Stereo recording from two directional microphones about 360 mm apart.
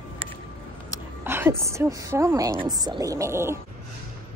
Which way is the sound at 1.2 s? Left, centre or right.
Centre.